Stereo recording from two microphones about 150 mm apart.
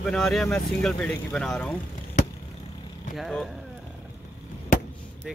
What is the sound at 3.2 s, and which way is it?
Speech, centre (ahead or behind).